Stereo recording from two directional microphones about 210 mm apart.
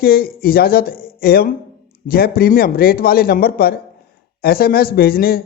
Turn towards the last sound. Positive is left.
turn(degrees=45)  # may be behind; listen again after turning